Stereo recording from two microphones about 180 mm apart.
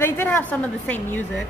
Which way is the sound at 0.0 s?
10° left (ahead or behind).